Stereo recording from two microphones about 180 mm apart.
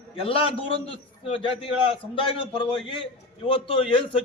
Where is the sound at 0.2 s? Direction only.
30° left (ahead or behind).